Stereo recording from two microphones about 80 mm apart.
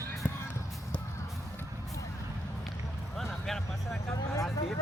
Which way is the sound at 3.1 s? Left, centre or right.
Centre.